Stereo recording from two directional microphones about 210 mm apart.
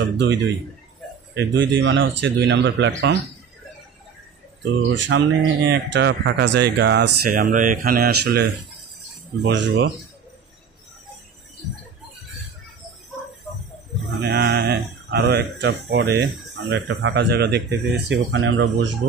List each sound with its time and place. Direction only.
0.0 s speech: 60° right (ahead or behind)
4.8 s speech: 55° right (ahead or behind)
9.4 s speech: 55° right (ahead or behind)
14.2 s speech: 50° right (ahead or behind)